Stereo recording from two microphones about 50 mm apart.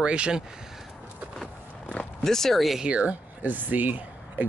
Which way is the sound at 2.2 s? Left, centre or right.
Centre.